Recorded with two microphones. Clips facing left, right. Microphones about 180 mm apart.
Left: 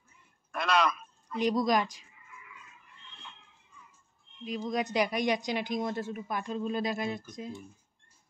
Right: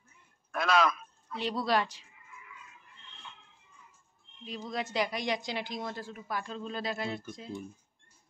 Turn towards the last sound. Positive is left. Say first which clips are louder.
# left 2 dB
turn(degrees=20)  # may be behind; listen again after turning